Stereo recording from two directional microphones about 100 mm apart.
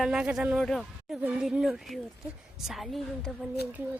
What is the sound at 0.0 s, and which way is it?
Speech, 5° right (ahead or behind).